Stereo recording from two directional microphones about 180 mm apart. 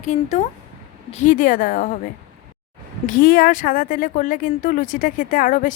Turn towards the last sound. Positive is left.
turn(degrees=45)  # may be behind; listen again after turning